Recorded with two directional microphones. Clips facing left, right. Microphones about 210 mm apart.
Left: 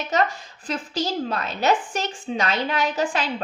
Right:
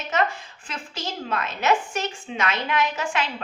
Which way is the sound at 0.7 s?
35° left (ahead or behind).